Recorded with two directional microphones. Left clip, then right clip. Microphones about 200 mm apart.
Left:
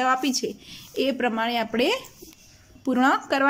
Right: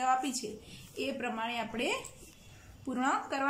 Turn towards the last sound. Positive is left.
turn(degrees=40)  # may be behind; listen again after turning